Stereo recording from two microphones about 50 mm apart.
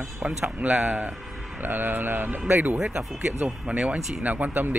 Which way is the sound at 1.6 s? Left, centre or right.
Right.